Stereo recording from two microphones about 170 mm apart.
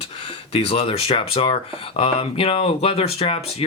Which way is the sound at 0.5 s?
35° left (ahead or behind).